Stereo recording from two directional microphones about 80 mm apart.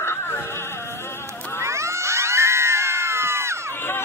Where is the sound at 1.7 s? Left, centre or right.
Right.